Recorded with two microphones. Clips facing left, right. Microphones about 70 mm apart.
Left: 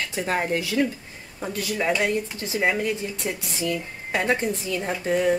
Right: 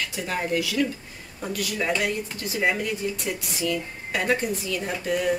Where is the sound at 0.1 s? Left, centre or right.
Left.